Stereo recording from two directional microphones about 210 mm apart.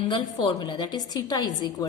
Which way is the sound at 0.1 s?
20° left (ahead or behind).